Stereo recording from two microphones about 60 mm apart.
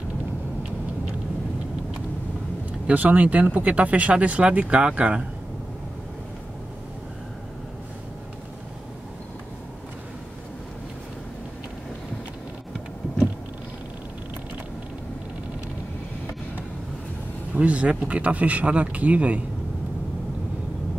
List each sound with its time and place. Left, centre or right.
2.9 s speech: right
17.6 s speech: right